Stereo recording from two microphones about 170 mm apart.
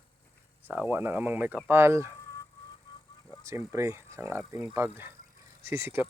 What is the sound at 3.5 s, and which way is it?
Speech, 15° right (ahead or behind).